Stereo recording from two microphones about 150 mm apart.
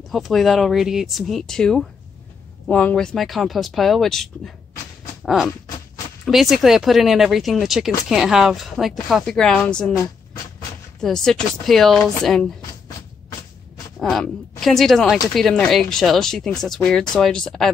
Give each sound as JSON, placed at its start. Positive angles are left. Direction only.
{"t": 0.1, "sound": "speech", "side_deg": 0}
{"t": 5.2, "sound": "a sound", "side_deg": 0}
{"t": 6.2, "sound": "speech", "side_deg": 0}
{"t": 11.0, "sound": "speech", "side_deg": 5}
{"t": 13.9, "sound": "speech", "side_deg": 0}